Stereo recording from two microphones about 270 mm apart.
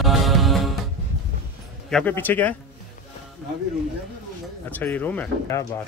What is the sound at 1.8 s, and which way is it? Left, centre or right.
Speech, centre.